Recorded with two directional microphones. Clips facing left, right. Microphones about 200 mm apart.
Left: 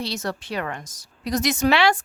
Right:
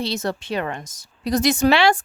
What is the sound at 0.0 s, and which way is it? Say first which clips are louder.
Speech: right 4 dB; 25° right (ahead or behind).